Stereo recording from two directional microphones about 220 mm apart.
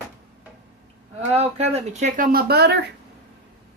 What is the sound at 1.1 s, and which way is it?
Speech, 30° right (ahead or behind).